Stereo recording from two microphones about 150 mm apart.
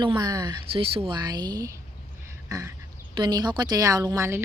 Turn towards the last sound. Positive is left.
turn(degrees=-20)  # may be behind; listen again after turning